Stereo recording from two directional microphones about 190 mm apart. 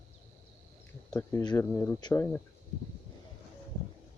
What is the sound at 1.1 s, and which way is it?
Speech, 20° left (ahead or behind).